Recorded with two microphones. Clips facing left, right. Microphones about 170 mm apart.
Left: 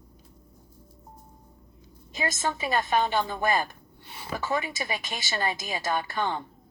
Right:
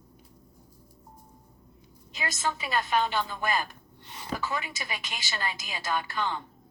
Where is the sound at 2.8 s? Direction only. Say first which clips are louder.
Left 2 dB; 45° left (ahead or behind).